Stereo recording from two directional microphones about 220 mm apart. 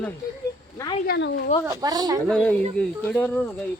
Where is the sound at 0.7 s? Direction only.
15° left (ahead or behind).